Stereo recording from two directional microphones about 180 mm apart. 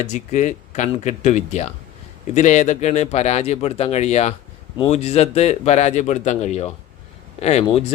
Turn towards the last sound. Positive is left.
turn(degrees=35)  # may be behind; listen again after turning